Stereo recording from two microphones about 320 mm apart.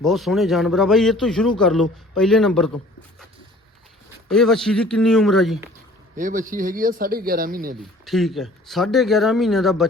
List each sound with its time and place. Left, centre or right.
0.0 s a man's voice: centre
4.3 s a man's voice: centre
6.1 s speech: right
7.8 s a man's voice: centre